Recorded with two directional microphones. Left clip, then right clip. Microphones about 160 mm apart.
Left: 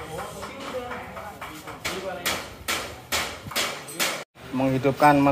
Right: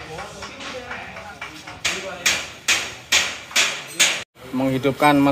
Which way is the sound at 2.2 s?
90° left.